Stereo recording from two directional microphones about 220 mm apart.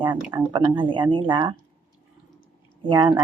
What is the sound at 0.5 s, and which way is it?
Speech, 20° right (ahead or behind).